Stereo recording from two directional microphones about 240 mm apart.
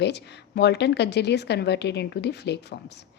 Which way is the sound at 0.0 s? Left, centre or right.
Left.